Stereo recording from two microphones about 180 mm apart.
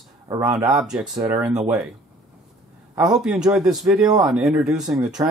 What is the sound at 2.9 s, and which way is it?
A man's voice, 5° right (ahead or behind).